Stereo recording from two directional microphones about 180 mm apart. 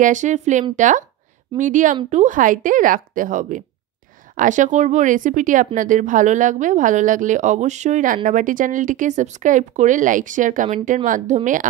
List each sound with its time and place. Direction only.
0.0 s speech: 45° right (ahead or behind)